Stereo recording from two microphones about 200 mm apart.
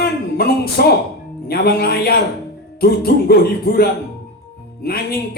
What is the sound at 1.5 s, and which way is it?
Speech, 50° left (ahead or behind).